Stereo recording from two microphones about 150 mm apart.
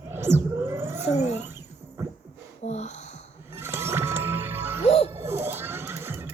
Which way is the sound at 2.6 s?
50° left (ahead or behind).